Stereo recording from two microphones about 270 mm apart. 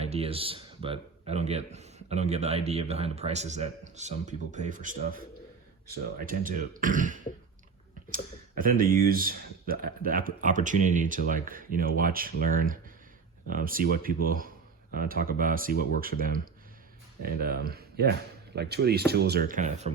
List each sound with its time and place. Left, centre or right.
0.0 s speech: right
6.2 s speech: right
17.4 s speech: right